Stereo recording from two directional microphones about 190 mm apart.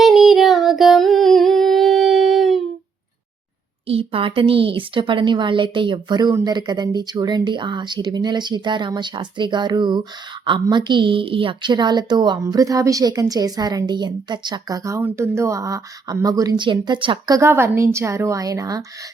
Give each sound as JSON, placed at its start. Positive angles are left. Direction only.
{"t": 0.0, "sound": "female singing", "side_deg": 0}
{"t": 3.8, "sound": "a woman's voice", "side_deg": -30}